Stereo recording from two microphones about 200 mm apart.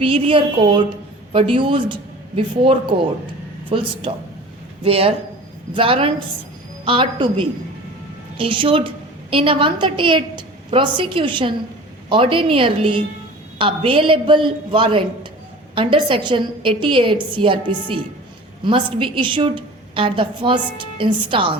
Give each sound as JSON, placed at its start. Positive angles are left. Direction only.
{"t": 0.0, "sound": "a woman's voice", "side_deg": -25}
{"t": 18.6, "sound": "a woman's voice", "side_deg": -25}